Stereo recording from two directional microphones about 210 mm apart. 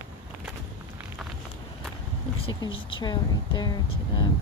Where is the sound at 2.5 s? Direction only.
20° left (ahead or behind).